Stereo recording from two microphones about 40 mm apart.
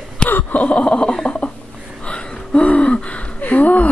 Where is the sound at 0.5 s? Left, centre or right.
Left.